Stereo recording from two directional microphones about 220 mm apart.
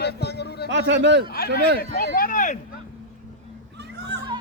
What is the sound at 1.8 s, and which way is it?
Speech, 40° left (ahead or behind).